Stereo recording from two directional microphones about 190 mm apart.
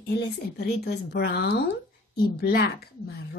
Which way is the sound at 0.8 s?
60° left (ahead or behind).